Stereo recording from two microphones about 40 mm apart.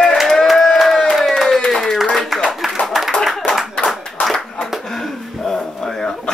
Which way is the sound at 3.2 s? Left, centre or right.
Centre.